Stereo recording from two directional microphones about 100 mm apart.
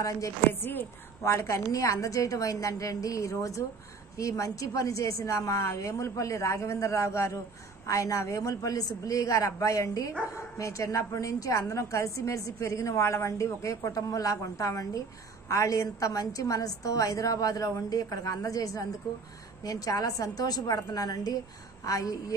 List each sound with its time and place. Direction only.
0.5 s speech: 20° left (ahead or behind)